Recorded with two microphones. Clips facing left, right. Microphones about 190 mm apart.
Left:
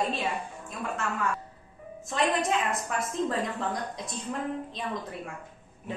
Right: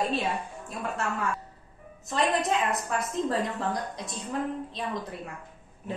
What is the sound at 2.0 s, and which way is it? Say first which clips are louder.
Speech: right 1 dB; centre (ahead or behind).